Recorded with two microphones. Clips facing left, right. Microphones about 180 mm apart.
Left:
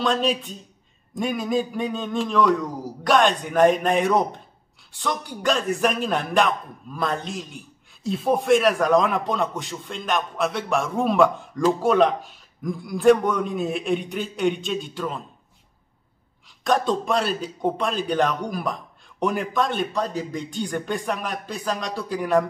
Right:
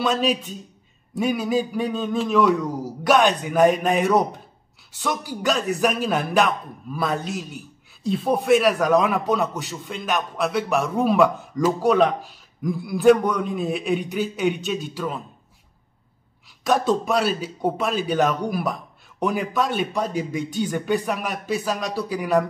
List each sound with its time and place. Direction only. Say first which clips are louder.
0.0 s a man's voice: right 1 dB; 5° right (ahead or behind)
16.6 s a man's voice: right 1 dB; 5° right (ahead or behind)